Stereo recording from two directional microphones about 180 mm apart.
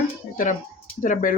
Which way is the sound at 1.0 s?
45° left (ahead or behind).